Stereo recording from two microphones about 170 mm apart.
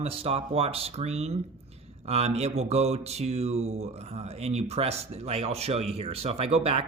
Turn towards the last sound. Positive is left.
turn(degrees=-35)  # may be behind; listen again after turning